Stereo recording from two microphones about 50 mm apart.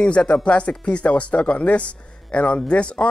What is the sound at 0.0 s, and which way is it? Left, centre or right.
Speech, left.